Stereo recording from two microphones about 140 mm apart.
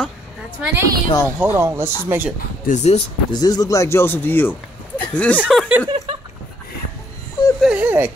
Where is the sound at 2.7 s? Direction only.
50° left (ahead or behind).